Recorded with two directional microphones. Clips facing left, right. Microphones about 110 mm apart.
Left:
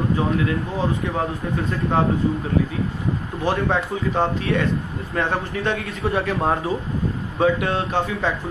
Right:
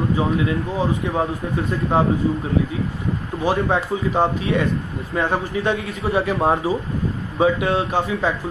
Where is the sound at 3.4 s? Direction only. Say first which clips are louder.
Right 2 dB; 10° right (ahead or behind).